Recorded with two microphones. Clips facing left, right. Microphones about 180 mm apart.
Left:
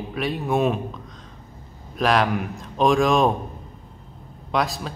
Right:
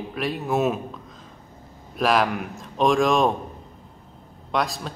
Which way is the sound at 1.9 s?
Centre (ahead or behind).